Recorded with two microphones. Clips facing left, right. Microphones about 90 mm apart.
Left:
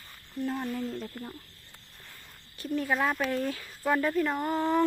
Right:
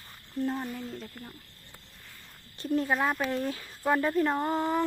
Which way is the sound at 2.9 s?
5° right (ahead or behind).